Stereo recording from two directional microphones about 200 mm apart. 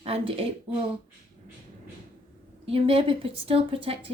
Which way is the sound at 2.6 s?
30° right (ahead or behind).